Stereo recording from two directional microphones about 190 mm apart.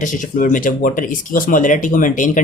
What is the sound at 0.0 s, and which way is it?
Speech, 45° left (ahead or behind).